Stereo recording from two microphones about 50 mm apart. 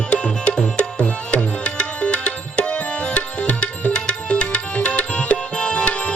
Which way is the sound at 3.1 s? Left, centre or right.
Left.